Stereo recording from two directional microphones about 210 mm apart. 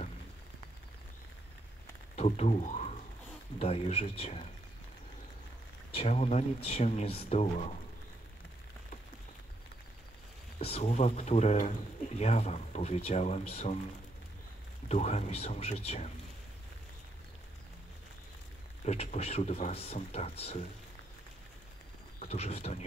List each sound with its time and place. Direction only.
2.1 s speech: 30° left (ahead or behind)
5.9 s speech: 30° left (ahead or behind)
10.6 s speech: 30° left (ahead or behind)
14.9 s speech: 30° left (ahead or behind)
18.9 s speech: 30° left (ahead or behind)
22.2 s speech: 30° left (ahead or behind)